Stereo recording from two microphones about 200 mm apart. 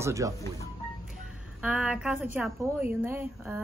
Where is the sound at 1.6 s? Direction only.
5° right (ahead or behind).